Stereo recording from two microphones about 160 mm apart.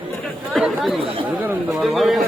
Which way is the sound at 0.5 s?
Centre (ahead or behind).